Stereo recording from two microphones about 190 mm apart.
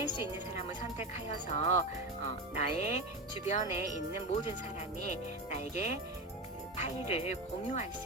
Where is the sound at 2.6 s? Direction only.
35° left (ahead or behind).